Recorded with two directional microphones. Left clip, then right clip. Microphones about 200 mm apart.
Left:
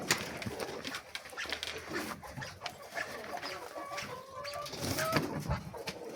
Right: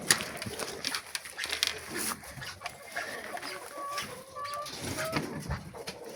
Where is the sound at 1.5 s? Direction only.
60° right (ahead or behind).